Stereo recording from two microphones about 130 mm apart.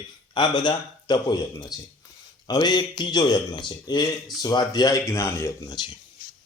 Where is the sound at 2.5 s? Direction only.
35° left (ahead or behind).